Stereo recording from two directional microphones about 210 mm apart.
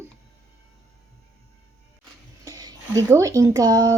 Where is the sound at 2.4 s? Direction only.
15° right (ahead or behind).